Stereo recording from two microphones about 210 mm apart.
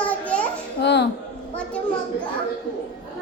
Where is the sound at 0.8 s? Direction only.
55° left (ahead or behind).